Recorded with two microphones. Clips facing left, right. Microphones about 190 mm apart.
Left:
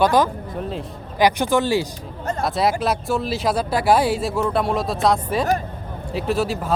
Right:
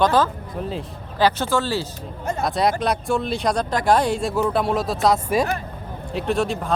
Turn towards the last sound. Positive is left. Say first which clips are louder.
# even
turn(degrees=5)  # may be behind; listen again after turning